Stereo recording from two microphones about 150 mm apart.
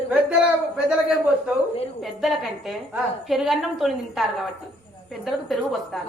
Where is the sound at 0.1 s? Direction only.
10° right (ahead or behind).